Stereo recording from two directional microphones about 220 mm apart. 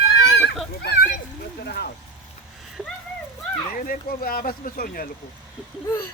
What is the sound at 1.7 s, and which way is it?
Vehicle, 45° left (ahead or behind).